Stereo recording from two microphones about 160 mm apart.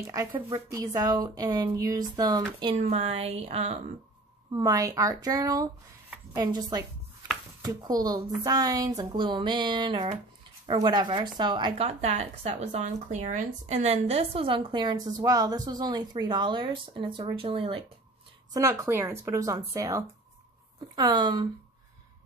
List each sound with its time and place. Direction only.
0.0 s speech: 20° right (ahead or behind)
2.7 s speech: 40° right (ahead or behind)
4.5 s speech: 25° right (ahead or behind)
11.8 s speech: 40° right (ahead or behind)
18.5 s speech: 20° right (ahead or behind)